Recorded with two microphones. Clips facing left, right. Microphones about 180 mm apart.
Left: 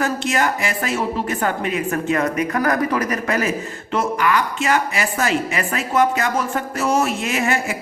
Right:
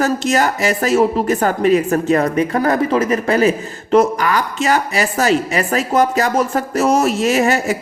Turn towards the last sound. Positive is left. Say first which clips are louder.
# right 6 dB
turn(degrees=-35)  # may be behind; listen again after turning